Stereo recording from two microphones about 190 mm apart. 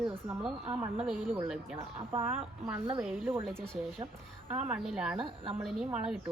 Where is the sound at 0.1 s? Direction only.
10° right (ahead or behind).